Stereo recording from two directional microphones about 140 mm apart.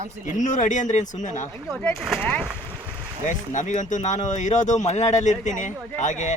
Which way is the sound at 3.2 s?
65° left (ahead or behind).